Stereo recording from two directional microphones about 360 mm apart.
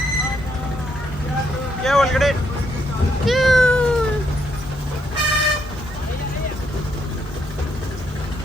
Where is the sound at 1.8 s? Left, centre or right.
Centre.